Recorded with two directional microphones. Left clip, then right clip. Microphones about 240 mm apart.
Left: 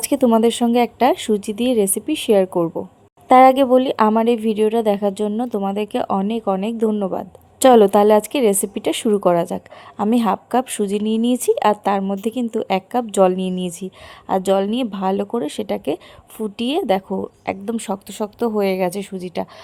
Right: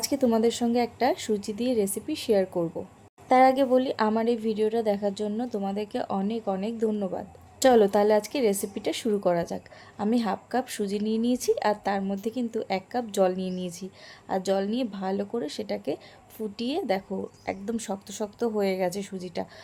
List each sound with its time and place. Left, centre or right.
0.0 s a woman's voice: left